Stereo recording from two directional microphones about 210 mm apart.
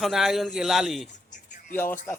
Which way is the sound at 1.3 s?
35° left (ahead or behind).